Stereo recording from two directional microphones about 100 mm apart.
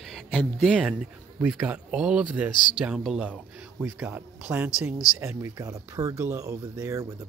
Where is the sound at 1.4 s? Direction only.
15° right (ahead or behind).